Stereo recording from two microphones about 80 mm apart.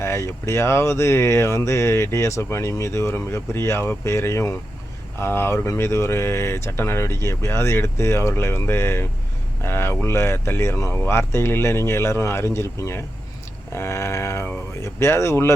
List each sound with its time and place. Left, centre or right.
0.0 s speech: left